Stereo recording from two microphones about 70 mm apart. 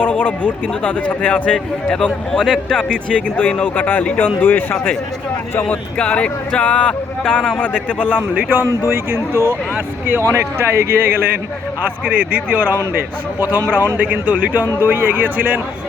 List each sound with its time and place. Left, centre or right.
0.0 s a sound: left
0.7 s a man's voice: centre
3.1 s speech: centre
5.6 s a man's voice: centre
8.4 s speech: right
9.3 s a man's voice: right
12.0 s speech: right
14.0 s speech: right